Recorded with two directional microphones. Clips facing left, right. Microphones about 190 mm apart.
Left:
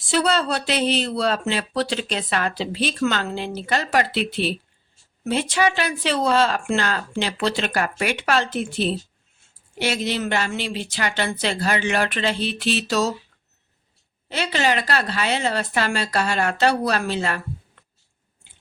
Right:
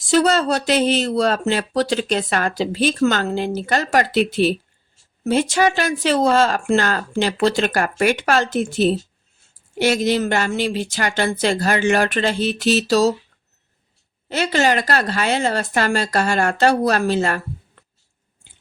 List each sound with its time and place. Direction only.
0.1 s speech: 45° right (ahead or behind)
14.3 s speech: 45° right (ahead or behind)